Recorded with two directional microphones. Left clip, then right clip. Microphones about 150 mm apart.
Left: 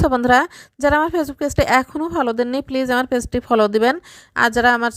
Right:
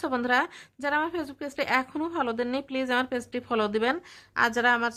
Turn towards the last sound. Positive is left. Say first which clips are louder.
# left 8 dB
turn(degrees=45)  # may be behind; listen again after turning